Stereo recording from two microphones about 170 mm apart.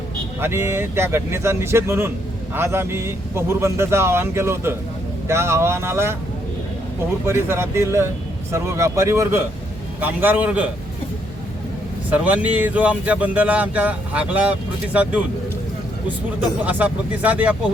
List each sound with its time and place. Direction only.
0.3 s speech: 15° right (ahead or behind)
7.3 s speech: 15° right (ahead or behind)
12.1 s speech: 10° right (ahead or behind)
16.6 s speech: 10° right (ahead or behind)